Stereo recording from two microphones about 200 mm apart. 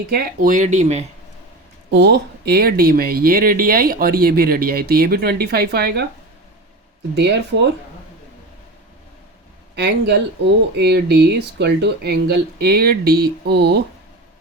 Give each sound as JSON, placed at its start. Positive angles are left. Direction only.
{"t": 0.1, "sound": "speech", "side_deg": -45}
{"t": 1.9, "sound": "speech", "side_deg": -60}
{"t": 7.2, "sound": "speech", "side_deg": -55}
{"t": 9.7, "sound": "speech", "side_deg": -55}